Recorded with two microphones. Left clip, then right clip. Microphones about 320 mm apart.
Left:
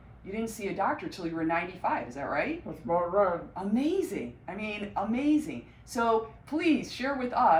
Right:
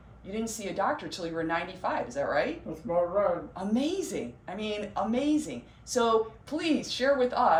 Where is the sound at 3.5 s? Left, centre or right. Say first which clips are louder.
Left 1 dB; right.